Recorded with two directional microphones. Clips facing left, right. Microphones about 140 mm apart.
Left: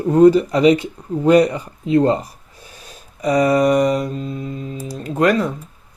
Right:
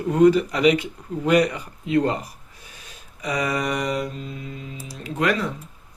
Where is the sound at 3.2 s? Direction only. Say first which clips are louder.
Left 10 dB; 40° left (ahead or behind).